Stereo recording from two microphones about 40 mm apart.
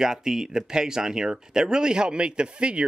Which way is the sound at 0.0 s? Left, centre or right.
Centre.